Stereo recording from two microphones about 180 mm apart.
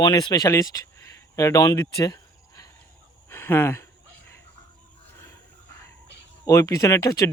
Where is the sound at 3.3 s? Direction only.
15° left (ahead or behind).